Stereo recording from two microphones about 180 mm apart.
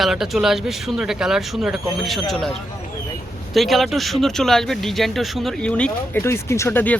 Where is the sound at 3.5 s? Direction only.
Centre (ahead or behind).